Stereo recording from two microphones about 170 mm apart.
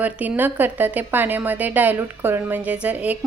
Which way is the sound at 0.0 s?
10° right (ahead or behind).